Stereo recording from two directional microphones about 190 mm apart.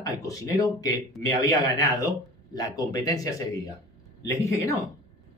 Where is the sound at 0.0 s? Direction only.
20° left (ahead or behind).